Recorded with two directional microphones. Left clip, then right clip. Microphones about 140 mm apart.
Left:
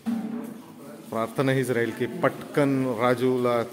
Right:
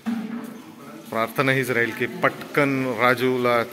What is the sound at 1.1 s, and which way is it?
A man's voice, 15° left (ahead or behind).